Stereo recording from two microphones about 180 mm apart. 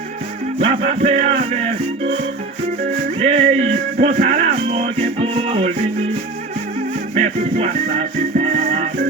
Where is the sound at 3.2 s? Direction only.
35° right (ahead or behind).